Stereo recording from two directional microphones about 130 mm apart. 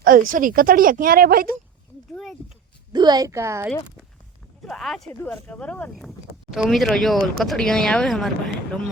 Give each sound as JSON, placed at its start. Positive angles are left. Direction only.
{"t": 0.0, "sound": "speech", "side_deg": -90}
{"t": 2.9, "sound": "a woman's voice", "side_deg": -35}
{"t": 4.6, "sound": "speech", "side_deg": 0}
{"t": 6.0, "sound": "speech", "side_deg": -5}